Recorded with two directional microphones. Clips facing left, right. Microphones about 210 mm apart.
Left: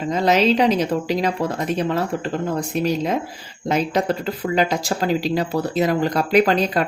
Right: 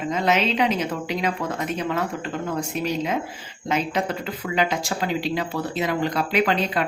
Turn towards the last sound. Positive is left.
turn(degrees=40)  # may be behind; listen again after turning